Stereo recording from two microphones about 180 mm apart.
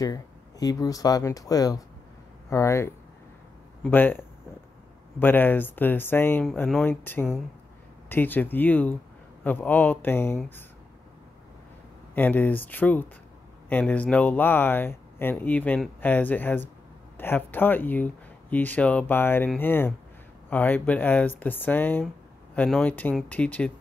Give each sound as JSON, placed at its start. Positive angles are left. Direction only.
{"t": 0.0, "sound": "speech", "side_deg": 20}
{"t": 12.2, "sound": "speech", "side_deg": 10}